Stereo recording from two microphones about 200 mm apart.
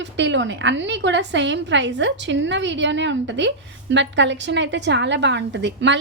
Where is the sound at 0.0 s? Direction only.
65° right (ahead or behind).